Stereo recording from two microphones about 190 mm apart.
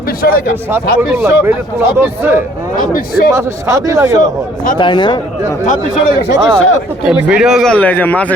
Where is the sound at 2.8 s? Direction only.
50° left (ahead or behind).